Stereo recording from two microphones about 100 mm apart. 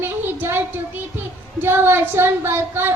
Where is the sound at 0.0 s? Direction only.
20° right (ahead or behind).